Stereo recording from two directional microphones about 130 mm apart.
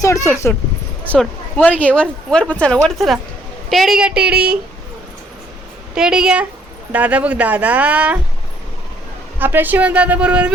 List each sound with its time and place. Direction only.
0.0 s speech: 25° left (ahead or behind)
1.0 s speech: 10° left (ahead or behind); by 4.5 s 10° right (ahead or behind)
5.9 s a woman's voice: 5° right (ahead or behind)
9.4 s speech: 15° right (ahead or behind)